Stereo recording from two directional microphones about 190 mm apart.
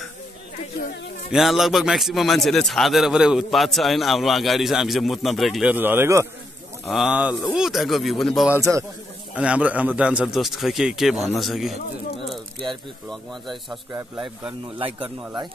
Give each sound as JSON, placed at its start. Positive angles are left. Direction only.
{"t": 1.3, "sound": "a man's voice", "side_deg": 0}
{"t": 8.5, "sound": "a man's voice", "side_deg": -15}
{"t": 9.3, "sound": "a man's voice", "side_deg": -5}
{"t": 14.8, "sound": "speech", "side_deg": -25}